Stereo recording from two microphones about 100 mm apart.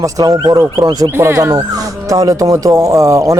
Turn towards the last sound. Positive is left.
turn(degrees=-30)  # may be behind; listen again after turning